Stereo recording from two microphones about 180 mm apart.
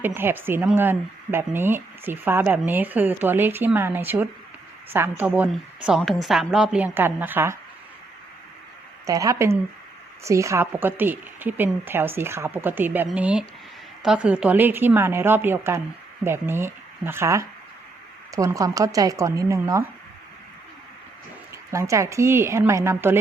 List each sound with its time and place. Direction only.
0.0 s a woman's voice: 10° right (ahead or behind)
9.0 s speech: 20° right (ahead or behind)
21.7 s speech: 15° right (ahead or behind)